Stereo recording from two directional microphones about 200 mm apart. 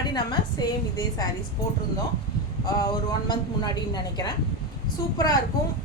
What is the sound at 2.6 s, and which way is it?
A woman's voice, 20° left (ahead or behind).